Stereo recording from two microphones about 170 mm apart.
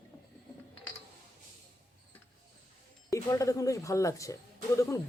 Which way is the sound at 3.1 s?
20° left (ahead or behind).